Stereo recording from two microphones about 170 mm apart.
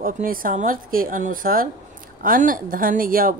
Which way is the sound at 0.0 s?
55° right (ahead or behind).